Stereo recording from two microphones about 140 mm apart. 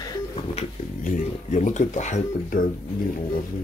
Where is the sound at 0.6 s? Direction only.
60° left (ahead or behind).